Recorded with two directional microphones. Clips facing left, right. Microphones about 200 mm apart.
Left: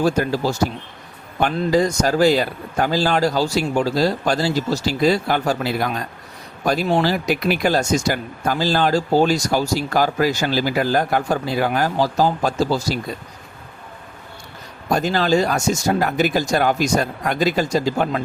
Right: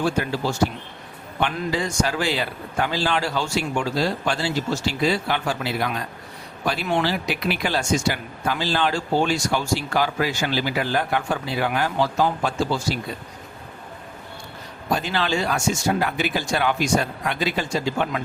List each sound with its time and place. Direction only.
0.0 s speech: 40° left (ahead or behind)
14.8 s speech: 45° left (ahead or behind)